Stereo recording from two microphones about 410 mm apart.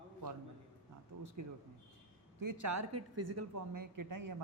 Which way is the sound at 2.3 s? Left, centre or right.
Right.